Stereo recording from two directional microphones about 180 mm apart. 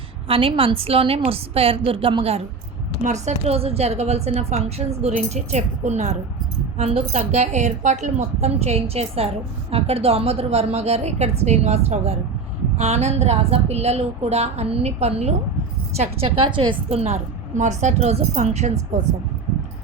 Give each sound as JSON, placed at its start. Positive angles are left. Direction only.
{"t": 0.3, "sound": "a woman's voice", "side_deg": -30}